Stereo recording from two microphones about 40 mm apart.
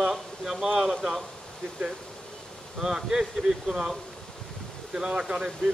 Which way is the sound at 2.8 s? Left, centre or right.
Centre.